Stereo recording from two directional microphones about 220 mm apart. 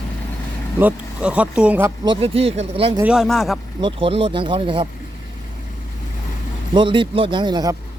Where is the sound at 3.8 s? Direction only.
25° right (ahead or behind).